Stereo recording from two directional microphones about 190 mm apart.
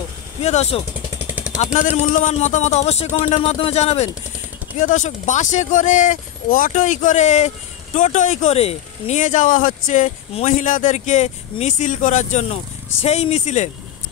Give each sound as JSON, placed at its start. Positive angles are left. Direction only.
{"t": 0.4, "sound": "speech", "side_deg": 35}
{"t": 1.2, "sound": "vehicle", "side_deg": -5}
{"t": 1.6, "sound": "speech", "side_deg": 35}